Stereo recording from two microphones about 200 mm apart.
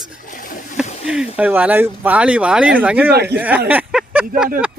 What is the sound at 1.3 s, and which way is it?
Speech, 5° right (ahead or behind).